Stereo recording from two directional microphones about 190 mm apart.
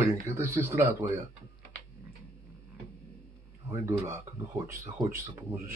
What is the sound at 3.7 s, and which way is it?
Speech, 15° right (ahead or behind).